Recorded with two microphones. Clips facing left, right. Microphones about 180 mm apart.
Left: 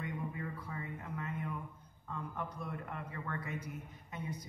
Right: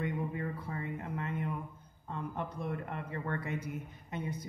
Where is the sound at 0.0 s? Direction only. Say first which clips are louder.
Right 5 dB; 55° right (ahead or behind).